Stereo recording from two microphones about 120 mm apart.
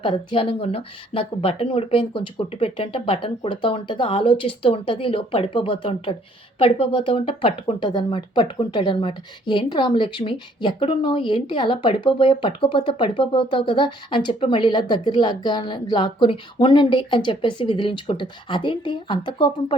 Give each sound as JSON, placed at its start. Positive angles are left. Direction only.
{"t": 0.0, "sound": "speech", "side_deg": 45}